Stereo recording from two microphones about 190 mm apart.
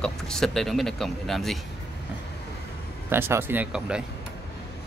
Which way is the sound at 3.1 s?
10° right (ahead or behind).